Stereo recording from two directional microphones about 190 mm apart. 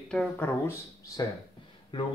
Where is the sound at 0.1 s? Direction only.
5° left (ahead or behind).